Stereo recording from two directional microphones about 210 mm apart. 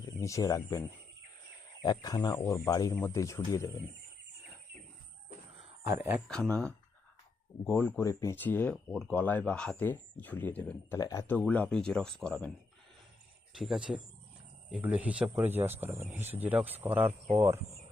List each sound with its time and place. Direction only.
0.0 s speech: 15° left (ahead or behind)
6.0 s speech: centre (ahead or behind)
13.6 s speech: 5° right (ahead or behind)